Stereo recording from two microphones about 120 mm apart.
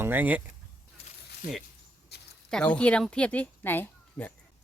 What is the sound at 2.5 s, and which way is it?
Speech, 10° left (ahead or behind).